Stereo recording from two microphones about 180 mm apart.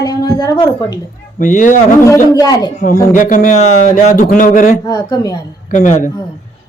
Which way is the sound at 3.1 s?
45° left (ahead or behind).